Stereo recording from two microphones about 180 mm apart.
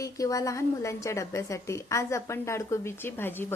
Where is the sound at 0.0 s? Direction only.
20° left (ahead or behind).